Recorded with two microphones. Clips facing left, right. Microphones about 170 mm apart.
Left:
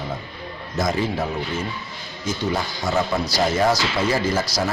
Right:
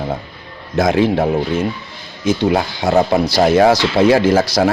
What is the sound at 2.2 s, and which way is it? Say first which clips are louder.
Speech: right 9 dB; 65° right (ahead or behind).